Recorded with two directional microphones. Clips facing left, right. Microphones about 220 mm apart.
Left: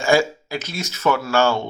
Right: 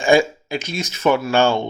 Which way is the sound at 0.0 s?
20° right (ahead or behind).